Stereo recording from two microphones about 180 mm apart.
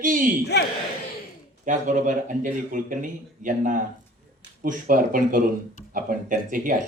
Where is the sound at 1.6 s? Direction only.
45° right (ahead or behind).